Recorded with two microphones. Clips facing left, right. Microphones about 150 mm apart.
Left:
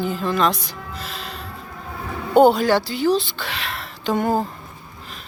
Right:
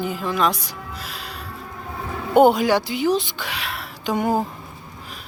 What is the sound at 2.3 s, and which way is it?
A woman's voice, 15° right (ahead or behind).